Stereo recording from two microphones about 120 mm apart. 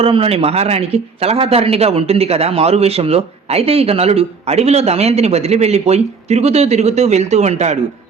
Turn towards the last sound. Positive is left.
turn(degrees=-70)  # may be behind; listen again after turning